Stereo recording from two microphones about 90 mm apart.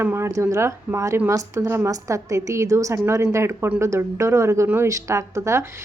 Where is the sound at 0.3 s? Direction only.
35° right (ahead or behind).